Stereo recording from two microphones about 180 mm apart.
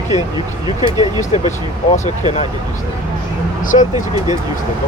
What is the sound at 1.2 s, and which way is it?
Speech, 40° left (ahead or behind).